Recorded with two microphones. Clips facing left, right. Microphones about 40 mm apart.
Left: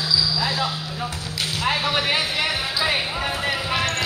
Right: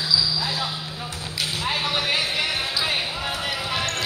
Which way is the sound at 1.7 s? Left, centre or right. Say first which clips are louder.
Left 2 dB; centre.